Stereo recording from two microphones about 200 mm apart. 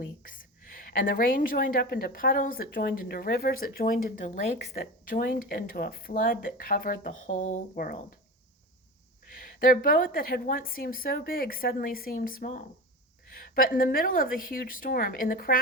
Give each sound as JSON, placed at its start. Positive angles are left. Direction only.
{"t": 0.9, "sound": "speech", "side_deg": 45}
{"t": 9.4, "sound": "speech", "side_deg": 45}